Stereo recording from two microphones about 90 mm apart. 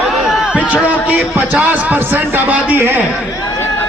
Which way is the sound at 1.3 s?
20° right (ahead or behind).